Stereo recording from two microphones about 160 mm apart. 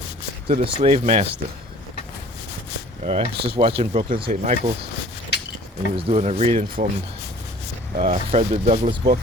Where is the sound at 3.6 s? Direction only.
35° right (ahead or behind).